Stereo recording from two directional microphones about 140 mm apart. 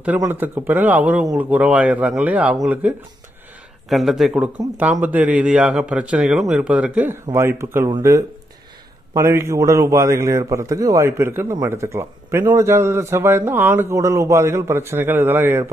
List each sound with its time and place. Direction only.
0.3 s speech: 15° right (ahead or behind)
3.9 s a man's voice: centre (ahead or behind)